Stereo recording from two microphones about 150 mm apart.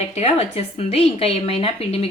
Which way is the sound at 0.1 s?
45° left (ahead or behind).